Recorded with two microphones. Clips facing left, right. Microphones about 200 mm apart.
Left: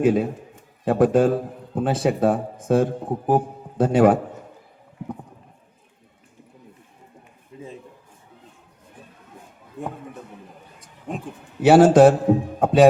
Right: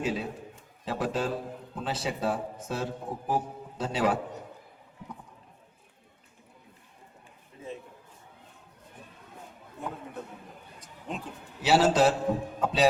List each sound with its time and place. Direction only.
0.0 s a man's voice: 50° left (ahead or behind)
11.1 s a man's voice: 50° left (ahead or behind)